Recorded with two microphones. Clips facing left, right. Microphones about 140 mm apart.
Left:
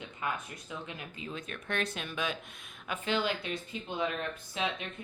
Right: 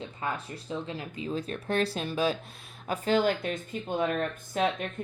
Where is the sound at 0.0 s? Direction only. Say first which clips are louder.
Right 3 dB; 30° right (ahead or behind).